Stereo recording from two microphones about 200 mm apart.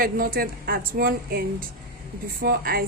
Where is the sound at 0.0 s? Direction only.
45° right (ahead or behind).